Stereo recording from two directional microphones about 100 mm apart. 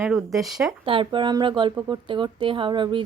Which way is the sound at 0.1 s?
Centre (ahead or behind).